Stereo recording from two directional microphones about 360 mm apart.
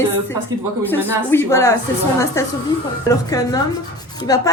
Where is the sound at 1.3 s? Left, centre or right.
Centre.